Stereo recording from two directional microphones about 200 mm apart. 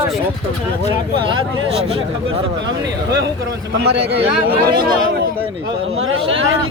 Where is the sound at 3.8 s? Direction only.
55° right (ahead or behind).